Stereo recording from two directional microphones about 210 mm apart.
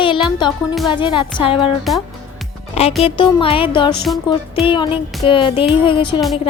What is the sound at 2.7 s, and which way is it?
Music, 30° left (ahead or behind).